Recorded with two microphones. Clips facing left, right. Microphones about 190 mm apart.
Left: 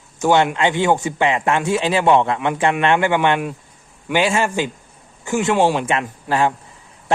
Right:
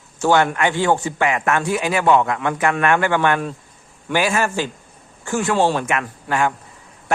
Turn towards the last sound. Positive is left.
turn(degrees=30)  # may be behind; listen again after turning